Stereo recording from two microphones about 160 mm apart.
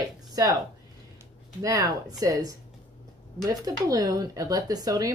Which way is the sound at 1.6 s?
20° right (ahead or behind).